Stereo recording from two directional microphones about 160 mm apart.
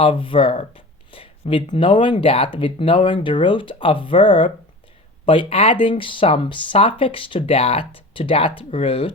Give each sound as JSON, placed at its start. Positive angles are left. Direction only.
{"t": 0.0, "sound": "speech", "side_deg": 35}